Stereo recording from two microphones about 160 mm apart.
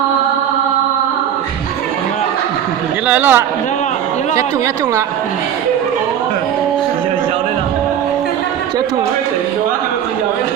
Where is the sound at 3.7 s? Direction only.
50° left (ahead or behind).